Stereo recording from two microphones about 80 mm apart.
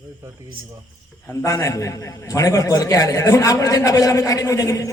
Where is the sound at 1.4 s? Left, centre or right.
Left.